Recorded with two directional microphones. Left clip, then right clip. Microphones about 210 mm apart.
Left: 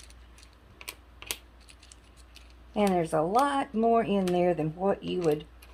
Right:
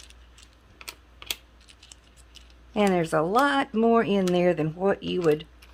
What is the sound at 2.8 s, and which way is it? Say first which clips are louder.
Speech: right 3 dB; 40° right (ahead or behind).